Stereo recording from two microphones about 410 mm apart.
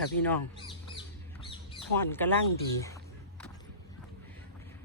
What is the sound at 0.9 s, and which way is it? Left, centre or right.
Bird, centre.